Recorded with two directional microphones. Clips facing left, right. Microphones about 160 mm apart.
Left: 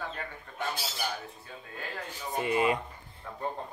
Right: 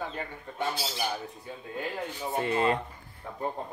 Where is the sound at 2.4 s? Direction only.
15° left (ahead or behind).